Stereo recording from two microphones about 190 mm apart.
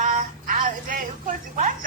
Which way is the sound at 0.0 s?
45° right (ahead or behind).